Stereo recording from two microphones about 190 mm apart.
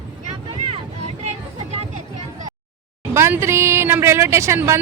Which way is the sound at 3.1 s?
15° right (ahead or behind).